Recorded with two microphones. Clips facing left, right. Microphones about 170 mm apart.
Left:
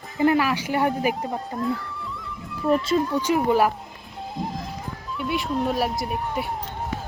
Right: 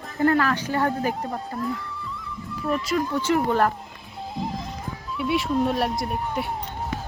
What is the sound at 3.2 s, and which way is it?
Speech, 15° left (ahead or behind).